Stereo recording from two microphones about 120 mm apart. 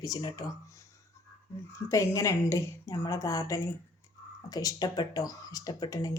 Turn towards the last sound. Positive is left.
turn(degrees=30)  # may be behind; listen again after turning